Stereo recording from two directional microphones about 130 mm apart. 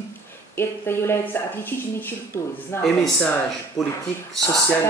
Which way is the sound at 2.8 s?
Centre (ahead or behind).